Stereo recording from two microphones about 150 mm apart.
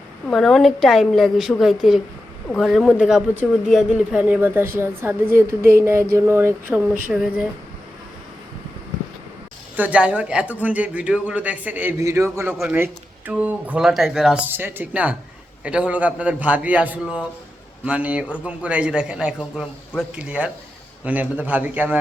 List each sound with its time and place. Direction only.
0.3 s a woman's voice: 5° left (ahead or behind); by 6.8 s 15° right (ahead or behind)
7.1 s a woman's voice: 5° right (ahead or behind)
9.7 s speech: 10° right (ahead or behind)